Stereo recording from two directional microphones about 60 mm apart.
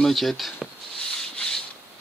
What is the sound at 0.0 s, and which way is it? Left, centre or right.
Speech, centre.